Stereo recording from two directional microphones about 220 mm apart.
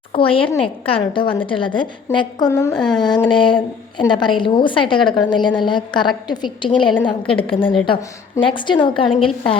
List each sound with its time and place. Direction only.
0.1 s a woman's voice: 25° left (ahead or behind)
2.7 s a sound: 5° left (ahead or behind)
3.0 s a woman's voice: 20° left (ahead or behind)